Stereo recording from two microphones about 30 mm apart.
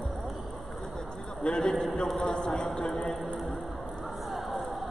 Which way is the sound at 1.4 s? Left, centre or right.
Left.